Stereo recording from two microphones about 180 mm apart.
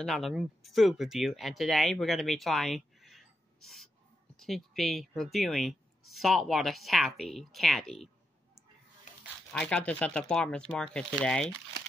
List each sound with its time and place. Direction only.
0.0 s speech: centre (ahead or behind)
9.5 s speech: 5° left (ahead or behind)